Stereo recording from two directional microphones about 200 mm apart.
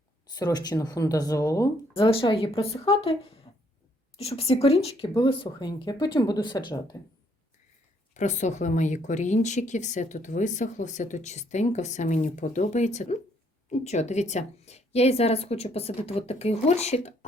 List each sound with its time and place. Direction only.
0.3 s speech: 20° left (ahead or behind)
2.0 s speech: 25° left (ahead or behind)
8.1 s speech: 35° left (ahead or behind)